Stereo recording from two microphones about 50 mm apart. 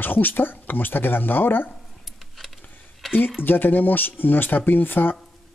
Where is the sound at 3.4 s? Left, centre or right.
Left.